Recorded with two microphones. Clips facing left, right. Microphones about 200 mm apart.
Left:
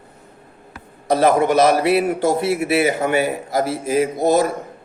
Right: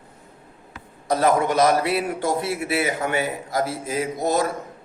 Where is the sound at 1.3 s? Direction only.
5° left (ahead or behind).